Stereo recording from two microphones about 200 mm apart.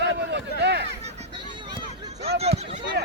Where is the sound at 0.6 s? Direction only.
55° right (ahead or behind).